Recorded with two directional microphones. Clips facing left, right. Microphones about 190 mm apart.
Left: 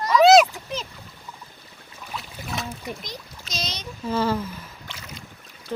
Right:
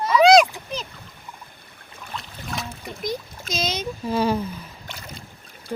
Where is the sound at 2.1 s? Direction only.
5° left (ahead or behind).